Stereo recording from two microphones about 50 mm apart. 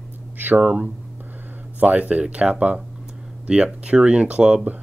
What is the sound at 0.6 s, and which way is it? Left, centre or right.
Speech, right.